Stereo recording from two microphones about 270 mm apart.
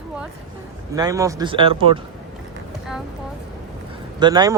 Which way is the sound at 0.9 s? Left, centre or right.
Centre.